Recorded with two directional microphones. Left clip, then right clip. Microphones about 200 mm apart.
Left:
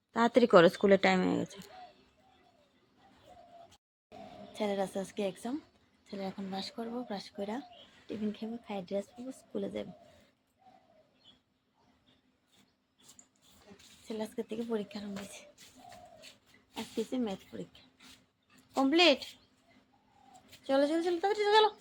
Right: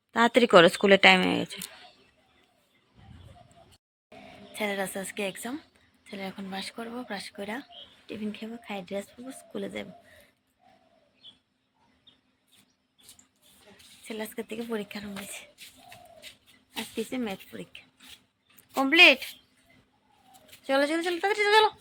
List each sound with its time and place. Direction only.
0.1 s speech: 5° right (ahead or behind)
4.5 s speech: centre (ahead or behind)
14.1 s speech: 5° right (ahead or behind)
16.7 s speech: 5° right (ahead or behind)
20.7 s speech: 15° right (ahead or behind)